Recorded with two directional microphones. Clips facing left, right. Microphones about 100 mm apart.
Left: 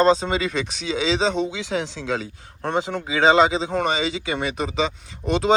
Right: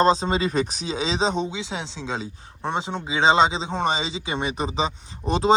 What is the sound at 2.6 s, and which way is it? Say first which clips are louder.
Speech: left 3 dB; 15° right (ahead or behind).